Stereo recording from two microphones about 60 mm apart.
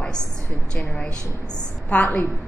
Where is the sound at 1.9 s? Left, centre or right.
Left.